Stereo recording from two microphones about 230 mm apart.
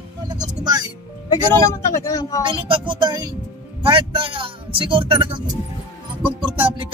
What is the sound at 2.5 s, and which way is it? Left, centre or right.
Speech, right.